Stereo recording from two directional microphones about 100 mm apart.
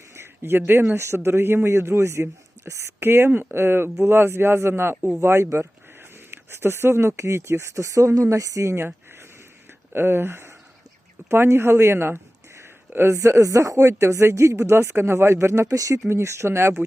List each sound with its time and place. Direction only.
0.1 s speech: 25° right (ahead or behind)
9.9 s speech: 25° right (ahead or behind)